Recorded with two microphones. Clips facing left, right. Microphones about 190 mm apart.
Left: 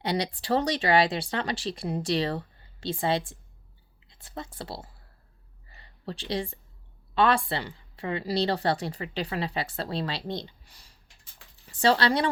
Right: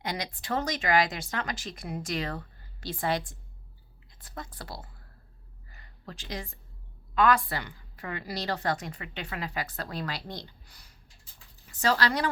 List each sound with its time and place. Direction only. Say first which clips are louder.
0.0 s a woman's voice: left 6 dB; 30° left (ahead or behind)
5.7 s a sound: left 7 dB; 30° left (ahead or behind)
7.1 s a woman's voice: left 1 dB; 30° left (ahead or behind)